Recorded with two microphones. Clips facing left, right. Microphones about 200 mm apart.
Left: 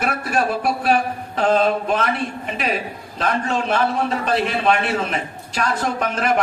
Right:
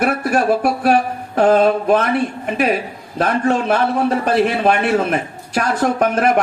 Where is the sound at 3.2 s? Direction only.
50° right (ahead or behind).